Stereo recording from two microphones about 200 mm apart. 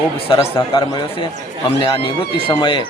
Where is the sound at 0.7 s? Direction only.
25° left (ahead or behind).